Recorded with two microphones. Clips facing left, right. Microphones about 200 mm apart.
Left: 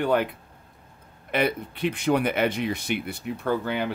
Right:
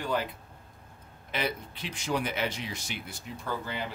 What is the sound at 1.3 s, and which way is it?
Speech, 60° left (ahead or behind).